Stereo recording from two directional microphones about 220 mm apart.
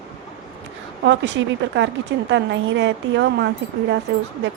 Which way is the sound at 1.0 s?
55° right (ahead or behind).